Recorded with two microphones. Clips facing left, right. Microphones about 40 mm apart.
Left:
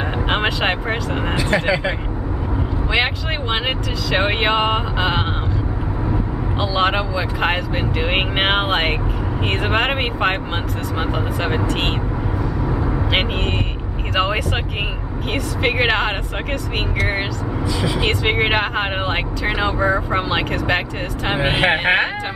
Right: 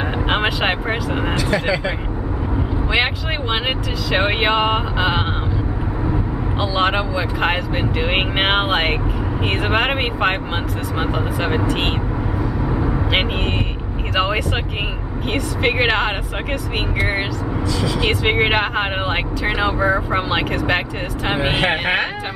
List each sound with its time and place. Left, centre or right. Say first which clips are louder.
0.3 s speech: even; centre
1.3 s speech: left 2 dB; centre
2.9 s speech: even; centre
6.6 s speech: even; centre
12.6 s vehicle: right 1 dB; centre
14.1 s speech: even; centre
17.7 s speech: left 1 dB; centre
18.0 s speech: right 2 dB; centre